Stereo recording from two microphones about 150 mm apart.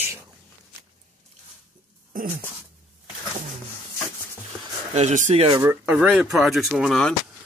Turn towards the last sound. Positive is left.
turn(degrees=5)  # may be behind; listen again after turning